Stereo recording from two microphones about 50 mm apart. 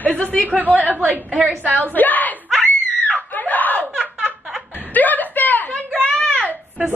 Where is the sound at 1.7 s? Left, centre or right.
Left.